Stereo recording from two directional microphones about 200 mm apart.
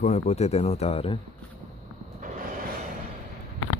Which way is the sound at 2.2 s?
40° right (ahead or behind).